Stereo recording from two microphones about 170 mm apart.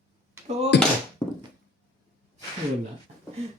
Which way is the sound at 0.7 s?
80° left.